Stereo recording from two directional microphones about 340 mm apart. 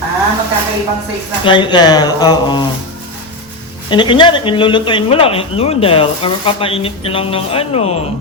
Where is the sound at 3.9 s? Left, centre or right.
Centre.